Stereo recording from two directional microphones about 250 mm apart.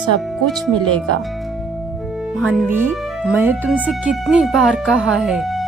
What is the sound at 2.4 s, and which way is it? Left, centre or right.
Speech, centre.